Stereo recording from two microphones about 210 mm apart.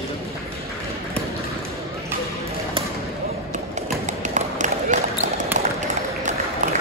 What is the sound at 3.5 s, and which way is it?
Run, 35° right (ahead or behind).